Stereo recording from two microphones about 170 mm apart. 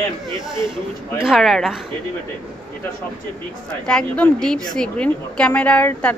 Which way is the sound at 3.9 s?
5° left (ahead or behind).